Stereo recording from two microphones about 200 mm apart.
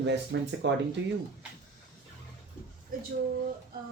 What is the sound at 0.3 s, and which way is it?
Speech, 60° right (ahead or behind).